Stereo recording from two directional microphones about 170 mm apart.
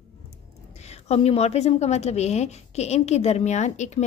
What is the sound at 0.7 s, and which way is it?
A woman's voice, 40° left (ahead or behind).